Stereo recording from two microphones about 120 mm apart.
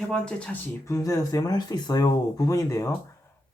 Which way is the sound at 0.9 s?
30° left (ahead or behind).